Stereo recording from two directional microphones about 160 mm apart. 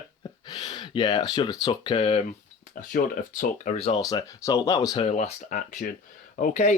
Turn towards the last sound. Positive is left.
turn(degrees=50)  # may be behind; listen again after turning